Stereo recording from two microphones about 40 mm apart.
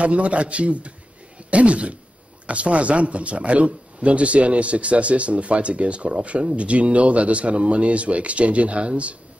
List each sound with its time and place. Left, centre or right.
0.0 s speech: right